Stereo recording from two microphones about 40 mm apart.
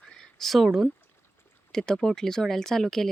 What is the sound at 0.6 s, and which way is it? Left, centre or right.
Speech, centre.